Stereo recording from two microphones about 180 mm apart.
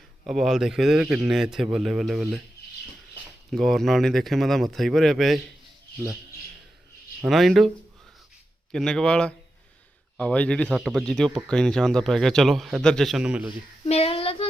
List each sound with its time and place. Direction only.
0.3 s a man's voice: centre (ahead or behind)
3.5 s a man's voice: centre (ahead or behind)
7.2 s a man's voice: centre (ahead or behind)
8.7 s a man's voice: 5° left (ahead or behind)
13.8 s child singing: 35° left (ahead or behind)